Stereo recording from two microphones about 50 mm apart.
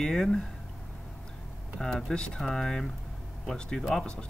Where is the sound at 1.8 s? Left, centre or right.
Centre.